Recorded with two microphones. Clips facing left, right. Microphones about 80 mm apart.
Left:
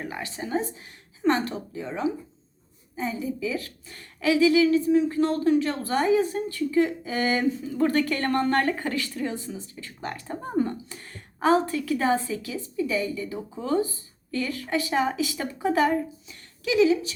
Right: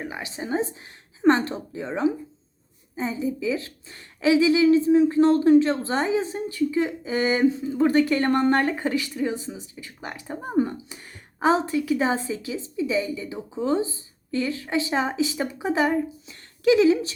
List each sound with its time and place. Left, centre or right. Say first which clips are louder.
0.0 s speech: right 1 dB; centre
1.3 s a woman's voice: right 4 dB; right
16.6 s speech: right 3 dB; right